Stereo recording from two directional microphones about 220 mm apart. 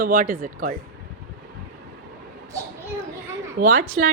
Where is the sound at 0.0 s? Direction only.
45° right (ahead or behind).